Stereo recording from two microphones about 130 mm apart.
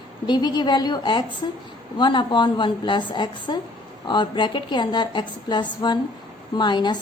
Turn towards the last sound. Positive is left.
turn(degrees=35)  # may be behind; listen again after turning